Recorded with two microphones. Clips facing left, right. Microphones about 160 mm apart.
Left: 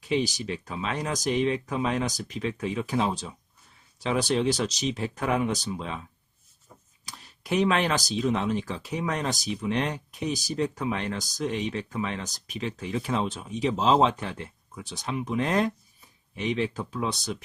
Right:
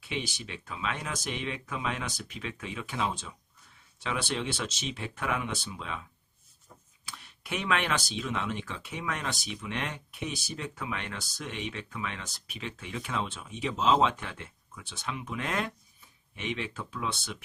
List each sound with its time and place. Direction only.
0.0 s speech: 40° left (ahead or behind)
7.0 s speech: 40° left (ahead or behind)